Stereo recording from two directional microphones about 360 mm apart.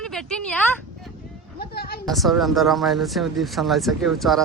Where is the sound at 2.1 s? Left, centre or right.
Centre.